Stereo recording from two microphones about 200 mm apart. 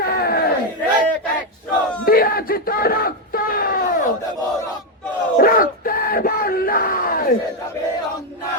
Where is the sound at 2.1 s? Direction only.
45° left (ahead or behind).